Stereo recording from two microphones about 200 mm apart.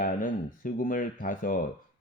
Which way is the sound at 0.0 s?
40° left (ahead or behind).